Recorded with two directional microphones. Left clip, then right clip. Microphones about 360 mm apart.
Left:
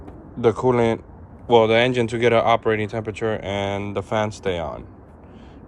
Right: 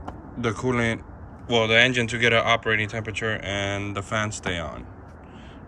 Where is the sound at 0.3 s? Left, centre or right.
Centre.